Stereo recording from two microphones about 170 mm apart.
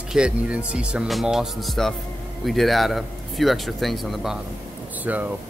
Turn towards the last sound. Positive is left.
turn(degrees=-10)  # may be behind; listen again after turning